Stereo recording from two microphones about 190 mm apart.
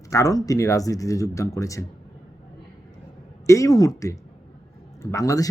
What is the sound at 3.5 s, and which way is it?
Speech, 15° left (ahead or behind).